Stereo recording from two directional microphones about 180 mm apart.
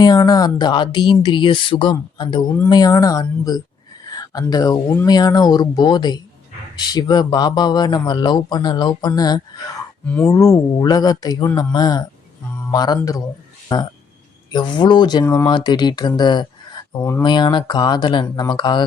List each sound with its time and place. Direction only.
0.0 s speech: 20° left (ahead or behind)